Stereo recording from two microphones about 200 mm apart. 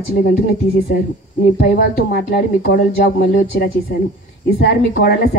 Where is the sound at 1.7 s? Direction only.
50° left (ahead or behind).